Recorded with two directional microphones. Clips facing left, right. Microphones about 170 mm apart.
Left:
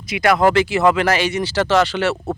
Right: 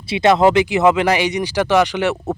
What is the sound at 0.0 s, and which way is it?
Speech, 25° right (ahead or behind).